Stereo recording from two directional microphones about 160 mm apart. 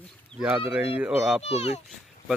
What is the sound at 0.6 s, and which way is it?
Speech, 10° right (ahead or behind).